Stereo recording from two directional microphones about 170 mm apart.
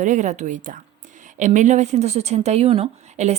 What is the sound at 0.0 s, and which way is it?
Speech, 45° right (ahead or behind).